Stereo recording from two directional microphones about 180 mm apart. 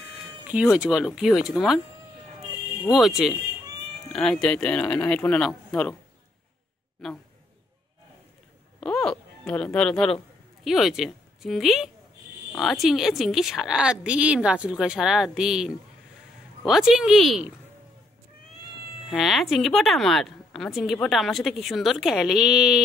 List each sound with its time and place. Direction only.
0.7 s a woman's voice: centre (ahead or behind)
2.9 s a woman's voice: centre (ahead or behind)
8.7 s a woman's voice: 5° left (ahead or behind)
19.0 s a woman's voice: centre (ahead or behind)